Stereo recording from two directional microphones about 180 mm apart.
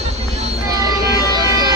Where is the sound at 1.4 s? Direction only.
20° right (ahead or behind).